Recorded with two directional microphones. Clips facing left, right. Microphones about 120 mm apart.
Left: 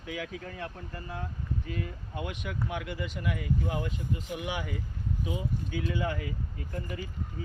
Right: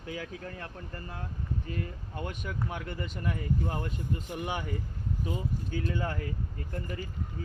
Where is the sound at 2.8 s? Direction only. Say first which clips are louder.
Left 1 dB; 45° right (ahead or behind).